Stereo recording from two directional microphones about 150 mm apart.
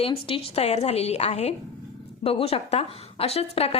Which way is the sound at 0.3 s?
40° left (ahead or behind).